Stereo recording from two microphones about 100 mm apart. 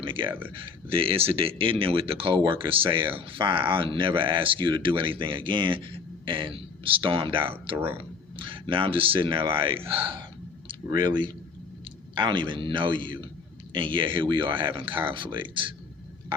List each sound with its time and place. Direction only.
0.0 s speech: 55° right (ahead or behind)
10.9 s speech: 50° right (ahead or behind)